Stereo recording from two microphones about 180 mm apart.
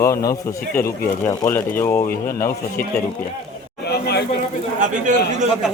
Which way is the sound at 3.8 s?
65° left (ahead or behind).